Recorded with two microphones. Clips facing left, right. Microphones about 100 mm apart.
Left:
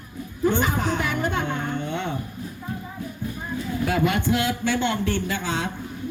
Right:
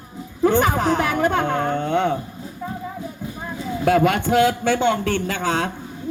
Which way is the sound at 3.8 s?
75° right (ahead or behind).